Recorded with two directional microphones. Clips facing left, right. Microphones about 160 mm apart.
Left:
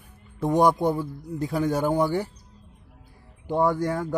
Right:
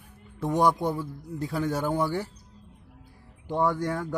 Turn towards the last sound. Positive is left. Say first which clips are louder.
# left 3 dB
turn(degrees=15)  # may be behind; listen again after turning